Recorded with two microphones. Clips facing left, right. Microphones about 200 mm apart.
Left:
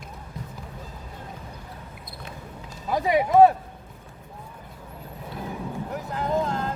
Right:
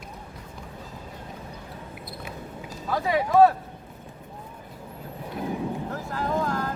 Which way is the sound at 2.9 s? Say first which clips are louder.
Left 2 dB; 15° left (ahead or behind).